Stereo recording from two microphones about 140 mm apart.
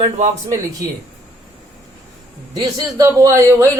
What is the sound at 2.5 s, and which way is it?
A man's voice, 25° right (ahead or behind).